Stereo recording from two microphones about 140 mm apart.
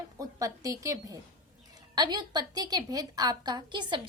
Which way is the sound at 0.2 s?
25° right (ahead or behind).